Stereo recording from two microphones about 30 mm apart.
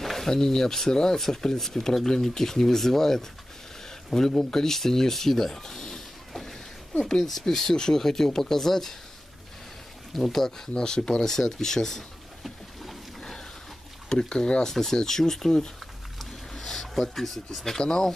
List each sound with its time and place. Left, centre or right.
0.0 s a sound: centre
0.3 s speech: centre
7.2 s speech: centre
10.1 s speech: centre
10.7 s speech: left
13.2 s a sound: centre
14.0 s speech: left
14.7 s speech: centre
16.2 s a sound: centre